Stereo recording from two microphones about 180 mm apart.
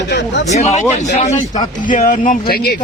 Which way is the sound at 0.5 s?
40° left (ahead or behind).